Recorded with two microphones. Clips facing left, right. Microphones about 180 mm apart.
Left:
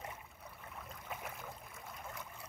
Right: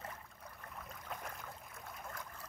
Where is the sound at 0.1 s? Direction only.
10° left (ahead or behind).